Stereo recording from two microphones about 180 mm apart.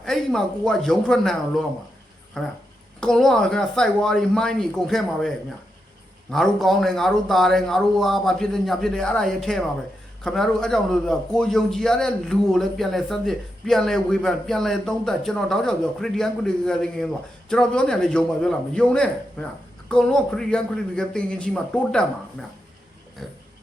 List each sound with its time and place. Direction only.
0.0 s a man's voice: centre (ahead or behind)
6.3 s a man's voice: centre (ahead or behind)